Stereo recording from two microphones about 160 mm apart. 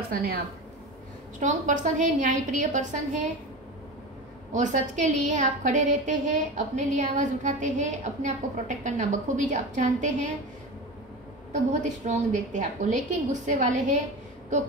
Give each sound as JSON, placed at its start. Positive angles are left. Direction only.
{"t": 0.1, "sound": "a woman's voice", "side_deg": -70}
{"t": 1.4, "sound": "a woman's voice", "side_deg": -50}
{"t": 4.5, "sound": "a woman's voice", "side_deg": -50}
{"t": 12.1, "sound": "a woman's voice", "side_deg": -50}